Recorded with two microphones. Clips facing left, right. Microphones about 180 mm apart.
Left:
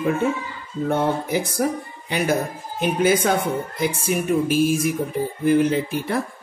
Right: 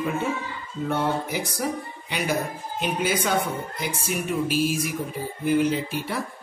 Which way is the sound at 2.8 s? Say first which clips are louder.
Left 7 dB; 55° left (ahead or behind).